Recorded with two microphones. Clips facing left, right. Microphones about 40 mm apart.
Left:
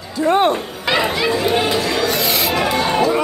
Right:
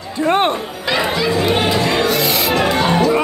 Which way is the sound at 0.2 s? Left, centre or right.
Right.